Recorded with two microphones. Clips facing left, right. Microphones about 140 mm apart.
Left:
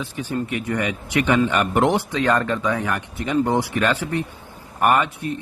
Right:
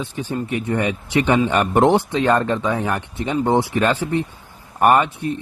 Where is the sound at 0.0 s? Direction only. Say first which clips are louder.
Right 1 dB; 30° right (ahead or behind).